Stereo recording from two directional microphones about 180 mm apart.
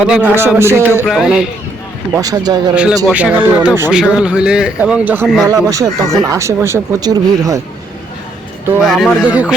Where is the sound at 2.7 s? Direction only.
5° right (ahead or behind).